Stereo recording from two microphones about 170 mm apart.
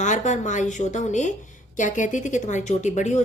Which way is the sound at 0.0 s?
45° left (ahead or behind).